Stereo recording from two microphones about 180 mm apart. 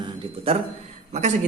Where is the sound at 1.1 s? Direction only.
40° right (ahead or behind).